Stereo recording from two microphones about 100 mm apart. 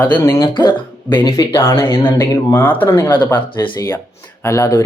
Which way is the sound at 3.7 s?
40° left (ahead or behind).